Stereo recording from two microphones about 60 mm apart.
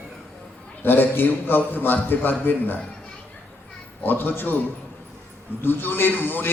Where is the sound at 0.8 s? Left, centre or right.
Left.